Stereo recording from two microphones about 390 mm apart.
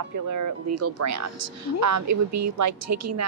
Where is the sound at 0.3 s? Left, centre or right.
Right.